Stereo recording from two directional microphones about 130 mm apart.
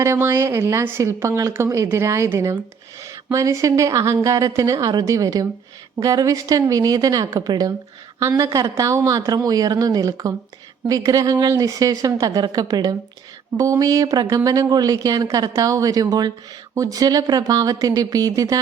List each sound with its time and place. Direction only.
0.0 s a woman's voice: 20° right (ahead or behind)